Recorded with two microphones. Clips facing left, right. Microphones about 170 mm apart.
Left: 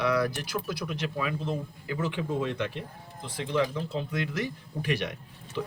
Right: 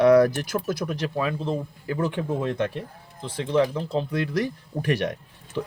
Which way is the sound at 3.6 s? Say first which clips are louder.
Right 6 dB; 35° right (ahead or behind).